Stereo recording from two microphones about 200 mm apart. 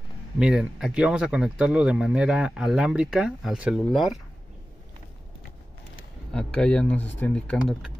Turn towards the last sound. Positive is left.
turn(degrees=5)  # may be behind; listen again after turning